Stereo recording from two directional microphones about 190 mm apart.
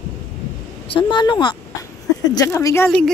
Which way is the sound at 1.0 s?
25° left (ahead or behind).